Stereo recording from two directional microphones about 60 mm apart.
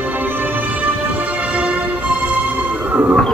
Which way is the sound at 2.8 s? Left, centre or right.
Right.